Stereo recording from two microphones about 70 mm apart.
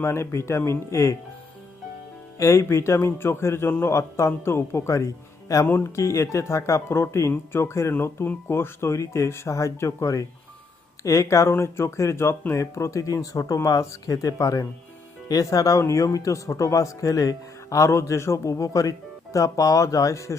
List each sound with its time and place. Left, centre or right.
0.0 s speech: left
2.4 s a man's voice: left